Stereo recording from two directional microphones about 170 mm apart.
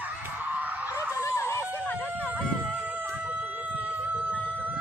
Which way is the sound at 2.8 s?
10° right (ahead or behind).